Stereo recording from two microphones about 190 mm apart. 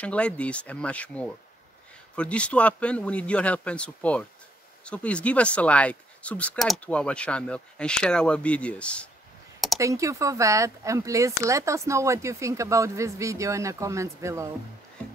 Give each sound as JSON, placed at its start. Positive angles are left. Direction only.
{"t": 0.0, "sound": "speech", "side_deg": 5}
{"t": 9.8, "sound": "speech", "side_deg": -15}